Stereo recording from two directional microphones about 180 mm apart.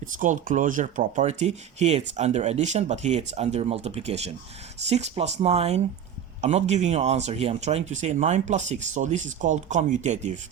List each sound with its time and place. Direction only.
0.0 s speech: 45° right (ahead or behind)